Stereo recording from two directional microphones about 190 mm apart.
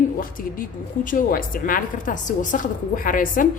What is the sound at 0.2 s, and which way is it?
A woman's voice, 45° left (ahead or behind).